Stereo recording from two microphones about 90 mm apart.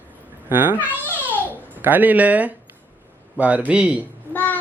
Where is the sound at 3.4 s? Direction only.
15° right (ahead or behind).